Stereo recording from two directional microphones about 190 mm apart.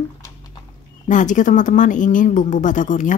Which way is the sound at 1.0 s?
40° left (ahead or behind).